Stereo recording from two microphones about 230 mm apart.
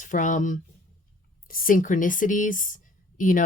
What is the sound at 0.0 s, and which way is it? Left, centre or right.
A woman's voice, left.